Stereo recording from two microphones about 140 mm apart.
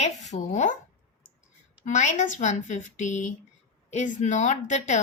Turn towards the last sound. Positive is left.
turn(degrees=55)  # may be behind; listen again after turning